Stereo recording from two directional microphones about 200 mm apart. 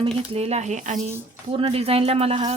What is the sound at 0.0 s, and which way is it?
A woman's voice, 30° right (ahead or behind).